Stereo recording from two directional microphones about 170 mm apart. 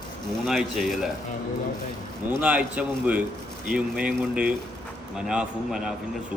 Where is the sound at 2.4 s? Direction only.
10° right (ahead or behind).